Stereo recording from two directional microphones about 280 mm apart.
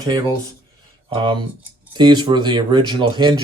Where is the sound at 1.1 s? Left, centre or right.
Centre.